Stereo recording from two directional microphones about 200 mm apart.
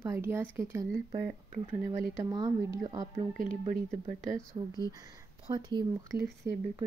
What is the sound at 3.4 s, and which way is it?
Speech, 40° right (ahead or behind).